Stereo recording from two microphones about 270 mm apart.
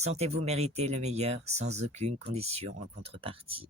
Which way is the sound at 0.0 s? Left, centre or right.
Right.